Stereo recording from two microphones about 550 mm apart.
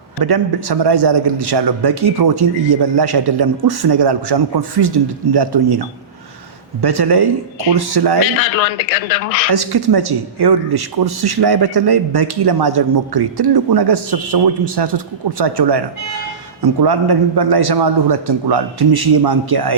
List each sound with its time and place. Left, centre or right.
0.2 s speech: right
6.8 s speech: right
8.2 s a man's voice: left
9.5 s speech: right